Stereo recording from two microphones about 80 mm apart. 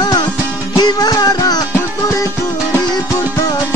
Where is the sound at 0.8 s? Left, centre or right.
Left.